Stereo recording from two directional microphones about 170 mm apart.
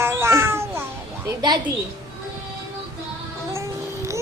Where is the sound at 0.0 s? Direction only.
15° right (ahead or behind).